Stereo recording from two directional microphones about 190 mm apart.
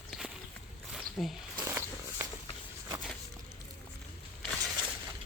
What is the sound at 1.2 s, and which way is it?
Speech, centre (ahead or behind).